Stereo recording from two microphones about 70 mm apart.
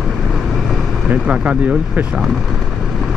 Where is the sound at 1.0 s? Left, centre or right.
Centre.